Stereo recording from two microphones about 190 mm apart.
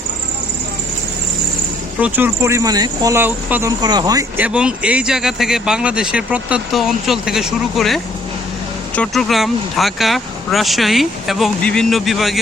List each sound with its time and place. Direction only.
2.0 s speech: 10° right (ahead or behind)
4.4 s speech: 5° right (ahead or behind)